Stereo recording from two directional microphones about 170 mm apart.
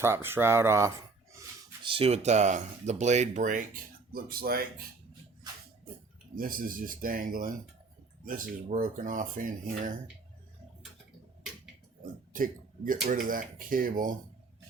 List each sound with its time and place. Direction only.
0.0 s speech: 15° right (ahead or behind)
1.8 s speech: 30° right (ahead or behind); by 3.6 s 45° right (ahead or behind)
4.1 s speech: 60° right (ahead or behind)
6.3 s speech: 55° right (ahead or behind)
12.3 s speech: 55° right (ahead or behind)